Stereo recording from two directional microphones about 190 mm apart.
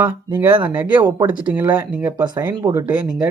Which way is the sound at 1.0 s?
20° right (ahead or behind).